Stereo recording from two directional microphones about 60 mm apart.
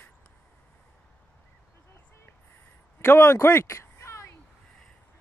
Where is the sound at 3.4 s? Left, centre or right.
Left.